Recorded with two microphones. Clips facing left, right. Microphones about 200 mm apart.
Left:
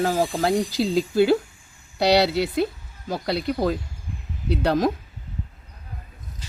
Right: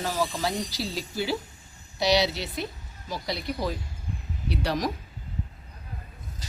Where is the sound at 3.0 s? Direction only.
60° left (ahead or behind).